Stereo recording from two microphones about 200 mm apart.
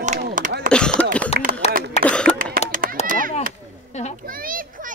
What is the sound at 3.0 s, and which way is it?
Chop, 45° right (ahead or behind).